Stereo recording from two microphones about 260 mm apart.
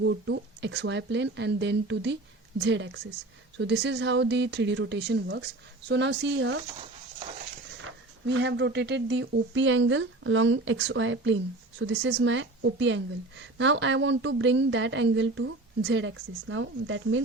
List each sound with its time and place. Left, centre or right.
0.0 s a woman's voice: right
7.8 s a woman's voice: right